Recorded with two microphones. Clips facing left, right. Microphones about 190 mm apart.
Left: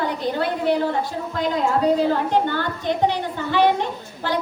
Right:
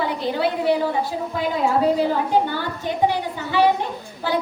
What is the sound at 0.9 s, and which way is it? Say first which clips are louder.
A woman's voice: right 1 dB; 5° right (ahead or behind).